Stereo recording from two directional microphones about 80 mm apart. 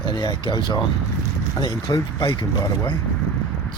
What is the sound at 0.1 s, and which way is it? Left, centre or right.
Speech, left.